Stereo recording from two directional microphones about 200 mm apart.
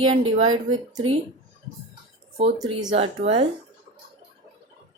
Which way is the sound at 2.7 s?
25° right (ahead or behind).